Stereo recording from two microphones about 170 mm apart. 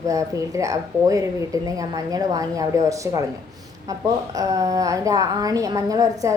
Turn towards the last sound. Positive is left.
turn(degrees=-20)  # may be behind; listen again after turning